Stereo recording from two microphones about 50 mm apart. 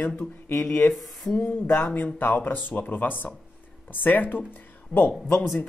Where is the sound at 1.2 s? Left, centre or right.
Left.